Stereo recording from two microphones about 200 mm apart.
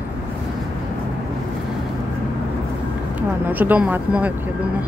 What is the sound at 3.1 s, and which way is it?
Speech, 10° right (ahead or behind).